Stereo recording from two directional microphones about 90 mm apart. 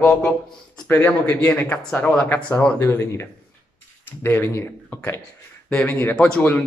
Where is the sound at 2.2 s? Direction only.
20° left (ahead or behind).